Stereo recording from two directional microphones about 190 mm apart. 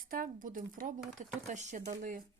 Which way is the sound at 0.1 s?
45° right (ahead or behind).